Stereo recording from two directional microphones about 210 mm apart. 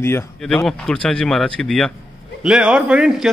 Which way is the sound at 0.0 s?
10° left (ahead or behind).